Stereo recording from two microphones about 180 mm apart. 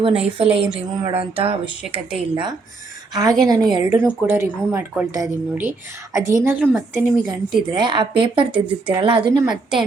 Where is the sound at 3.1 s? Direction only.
20° right (ahead or behind).